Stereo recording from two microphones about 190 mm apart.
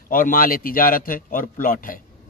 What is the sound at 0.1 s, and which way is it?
Speech, 45° left (ahead or behind).